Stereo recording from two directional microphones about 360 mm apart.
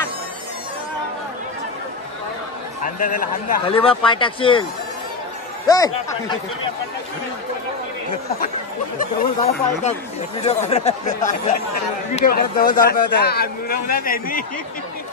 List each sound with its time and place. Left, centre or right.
2.8 s speech: left
5.7 s speech: centre
8.9 s speech: centre